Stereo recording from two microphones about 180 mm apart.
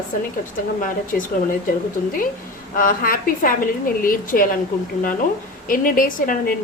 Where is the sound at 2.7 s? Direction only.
50° left (ahead or behind).